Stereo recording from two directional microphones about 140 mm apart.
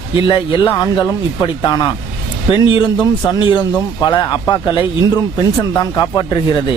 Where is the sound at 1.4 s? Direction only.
30° left (ahead or behind).